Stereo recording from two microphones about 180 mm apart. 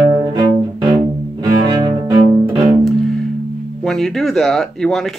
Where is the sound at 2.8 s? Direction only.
Centre (ahead or behind).